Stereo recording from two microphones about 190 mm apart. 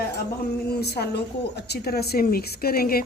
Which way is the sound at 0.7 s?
60° left (ahead or behind).